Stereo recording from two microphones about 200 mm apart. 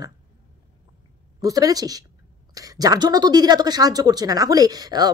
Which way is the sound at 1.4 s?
15° right (ahead or behind).